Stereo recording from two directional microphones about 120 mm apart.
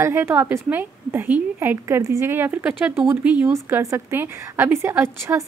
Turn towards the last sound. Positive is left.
turn(degrees=-20)  # may be behind; listen again after turning